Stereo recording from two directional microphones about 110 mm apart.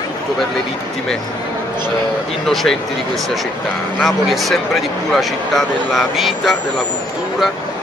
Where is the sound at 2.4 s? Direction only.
5° left (ahead or behind).